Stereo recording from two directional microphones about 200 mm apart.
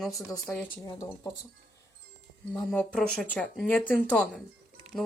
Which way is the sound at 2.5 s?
5° left (ahead or behind).